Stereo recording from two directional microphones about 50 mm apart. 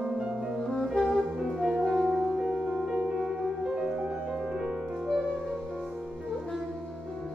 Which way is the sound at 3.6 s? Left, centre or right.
Right.